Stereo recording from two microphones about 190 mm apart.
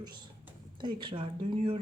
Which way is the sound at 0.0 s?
25° right (ahead or behind).